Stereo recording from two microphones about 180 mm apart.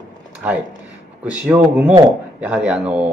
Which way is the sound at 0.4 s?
10° right (ahead or behind).